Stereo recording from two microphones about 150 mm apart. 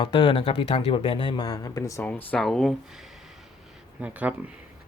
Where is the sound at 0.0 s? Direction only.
30° left (ahead or behind).